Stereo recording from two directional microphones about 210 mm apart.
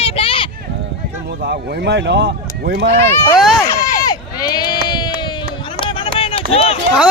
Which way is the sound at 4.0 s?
20° left (ahead or behind).